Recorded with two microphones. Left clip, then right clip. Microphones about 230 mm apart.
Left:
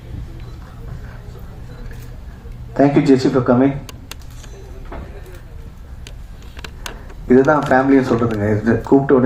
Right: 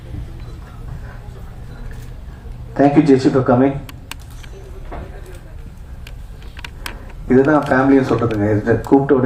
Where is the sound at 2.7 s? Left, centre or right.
Left.